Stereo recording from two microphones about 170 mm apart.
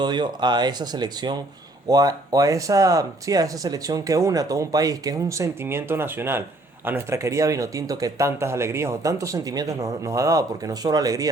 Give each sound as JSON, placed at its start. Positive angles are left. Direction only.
{"t": 0.0, "sound": "speech", "side_deg": -25}